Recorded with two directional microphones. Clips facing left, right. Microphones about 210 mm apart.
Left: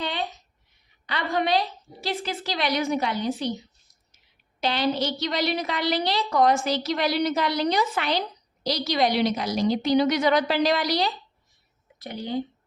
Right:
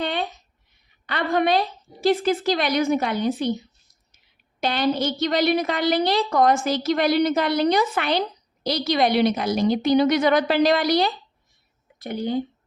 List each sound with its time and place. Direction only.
0.0 s a sound: 55° right (ahead or behind)
1.0 s a woman's voice: 55° right (ahead or behind)
4.6 s a woman's voice: 50° right (ahead or behind)